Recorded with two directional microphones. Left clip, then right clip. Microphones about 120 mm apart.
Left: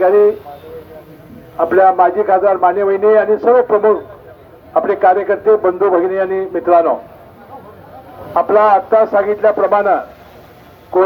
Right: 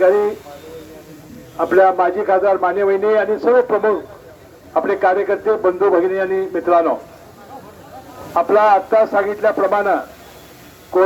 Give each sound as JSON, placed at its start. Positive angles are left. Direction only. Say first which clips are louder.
{"t": 0.0, "sound": "a man's voice", "louder": "left 4 dB", "side_deg": 40}
{"t": 1.5, "sound": "a man's voice", "louder": "left 3 dB", "side_deg": 45}
{"t": 8.3, "sound": "a man's voice", "louder": "left 2 dB", "side_deg": 40}